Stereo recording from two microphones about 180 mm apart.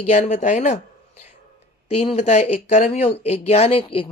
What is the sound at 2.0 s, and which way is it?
Speech, 35° left (ahead or behind).